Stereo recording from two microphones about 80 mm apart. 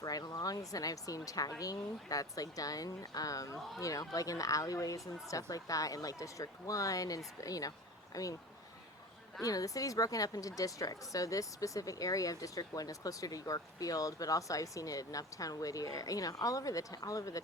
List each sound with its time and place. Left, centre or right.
0.0 s a woman's voice: left
9.4 s a woman's voice: left